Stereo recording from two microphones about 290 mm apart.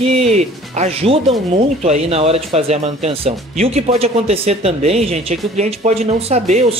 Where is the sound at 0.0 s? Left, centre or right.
Right.